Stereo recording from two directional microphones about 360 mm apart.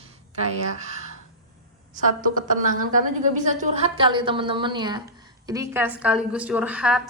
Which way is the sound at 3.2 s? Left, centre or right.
Right.